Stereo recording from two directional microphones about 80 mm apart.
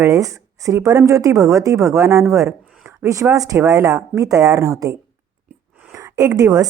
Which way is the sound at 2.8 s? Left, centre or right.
Right.